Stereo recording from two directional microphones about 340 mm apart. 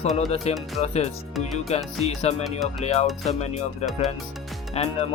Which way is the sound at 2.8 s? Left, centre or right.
Centre.